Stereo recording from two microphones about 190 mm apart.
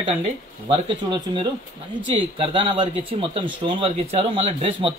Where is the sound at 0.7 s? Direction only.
25° right (ahead or behind).